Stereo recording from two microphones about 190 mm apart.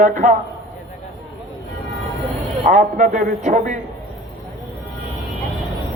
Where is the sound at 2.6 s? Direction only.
40° right (ahead or behind).